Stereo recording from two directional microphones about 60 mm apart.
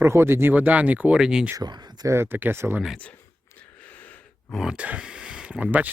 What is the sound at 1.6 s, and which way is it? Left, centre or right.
Speech, right.